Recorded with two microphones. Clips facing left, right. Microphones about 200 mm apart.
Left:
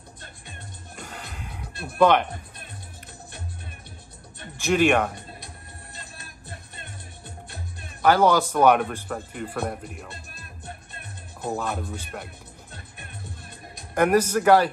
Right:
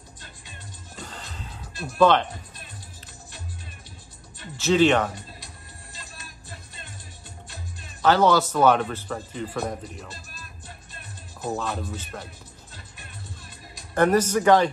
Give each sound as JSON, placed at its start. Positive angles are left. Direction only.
{"t": 0.9, "sound": "music", "side_deg": 10}
{"t": 1.7, "sound": "music", "side_deg": 60}
{"t": 2.0, "sound": "speech", "side_deg": 15}
{"t": 4.6, "sound": "speech", "side_deg": 15}
{"t": 5.9, "sound": "music", "side_deg": 55}
{"t": 8.0, "sound": "speech", "side_deg": 10}
{"t": 10.1, "sound": "music", "side_deg": 60}
{"t": 11.4, "sound": "speech", "side_deg": 10}
{"t": 12.7, "sound": "music", "side_deg": 55}
{"t": 13.9, "sound": "speech", "side_deg": 10}